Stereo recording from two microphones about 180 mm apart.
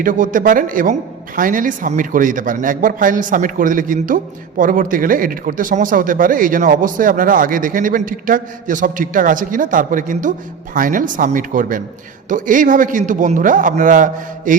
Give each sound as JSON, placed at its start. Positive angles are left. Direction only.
{"t": 0.0, "sound": "a man's voice", "side_deg": -50}